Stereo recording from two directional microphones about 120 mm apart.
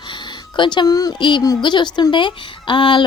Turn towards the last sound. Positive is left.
turn(degrees=45)  # may be behind; listen again after turning